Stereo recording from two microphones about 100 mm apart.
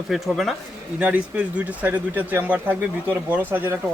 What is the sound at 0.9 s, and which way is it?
Speech, 15° right (ahead or behind).